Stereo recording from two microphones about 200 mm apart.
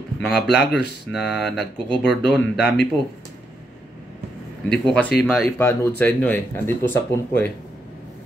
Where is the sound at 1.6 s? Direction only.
60° left (ahead or behind).